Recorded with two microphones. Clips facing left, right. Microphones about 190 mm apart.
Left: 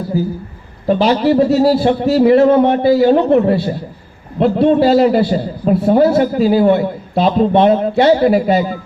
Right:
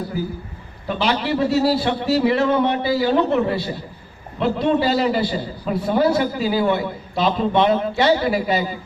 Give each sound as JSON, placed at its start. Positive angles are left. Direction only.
{"t": 0.9, "sound": "a man's voice", "side_deg": 40}